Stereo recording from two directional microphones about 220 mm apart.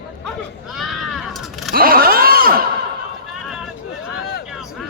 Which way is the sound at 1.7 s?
40° right (ahead or behind).